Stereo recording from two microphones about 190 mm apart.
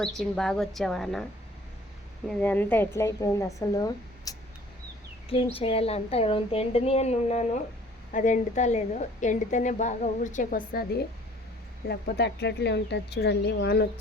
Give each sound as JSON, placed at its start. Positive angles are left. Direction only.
{"t": 0.2, "sound": "a woman's voice", "side_deg": 5}
{"t": 2.2, "sound": "a woman's voice", "side_deg": 10}
{"t": 5.3, "sound": "a woman's voice", "side_deg": 30}
{"t": 10.7, "sound": "speech", "side_deg": 55}